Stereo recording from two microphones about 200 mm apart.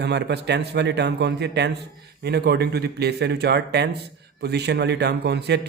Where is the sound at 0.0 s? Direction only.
55° right (ahead or behind).